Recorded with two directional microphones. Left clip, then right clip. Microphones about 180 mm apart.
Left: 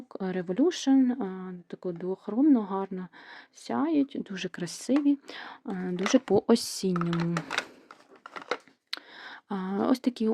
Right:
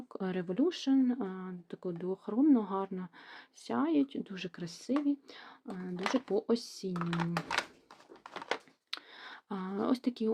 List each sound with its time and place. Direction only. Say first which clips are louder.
0.1 s speech: left 5 dB; 20° left (ahead or behind); by 6.9 s 50° left (ahead or behind)
6.9 s speech: left 5 dB; 5° left (ahead or behind)
8.9 s a sound: left 5 dB; 25° left (ahead or behind)